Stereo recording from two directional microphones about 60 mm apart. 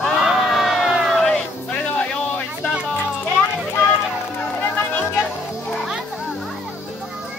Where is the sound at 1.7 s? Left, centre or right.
Left.